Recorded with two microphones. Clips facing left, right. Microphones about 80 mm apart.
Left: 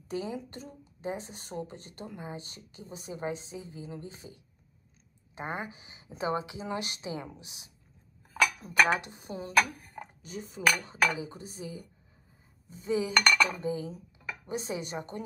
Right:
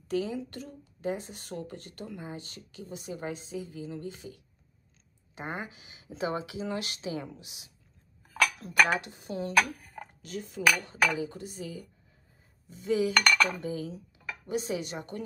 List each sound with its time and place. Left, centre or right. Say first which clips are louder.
0.1 s a woman's voice: right 4 dB; left
8.2 s cutlery: even; centre
9.0 s a woman's voice: even; left
9.3 s speech: right 1 dB; centre
10.2 s cutlery: right 4 dB; centre
10.6 s cutlery: right 1 dB; centre
11.1 s a woman's voice: right 4 dB; centre
13.1 s cutlery: even; centre
13.6 s a woman's voice: left 1 dB; left